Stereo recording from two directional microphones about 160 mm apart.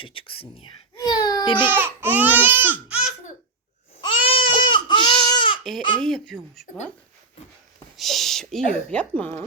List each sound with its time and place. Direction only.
0.0 s speech: 35° left (ahead or behind)
0.9 s baby cry: 25° left (ahead or behind)
1.7 s music: 10° right (ahead or behind)
4.0 s baby cry: 35° left (ahead or behind)
6.0 s speech: 5° left (ahead or behind)
7.9 s a sound: centre (ahead or behind)
8.9 s speech: 10° left (ahead or behind)